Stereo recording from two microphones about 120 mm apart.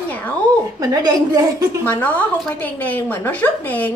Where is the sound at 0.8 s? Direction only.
30° right (ahead or behind).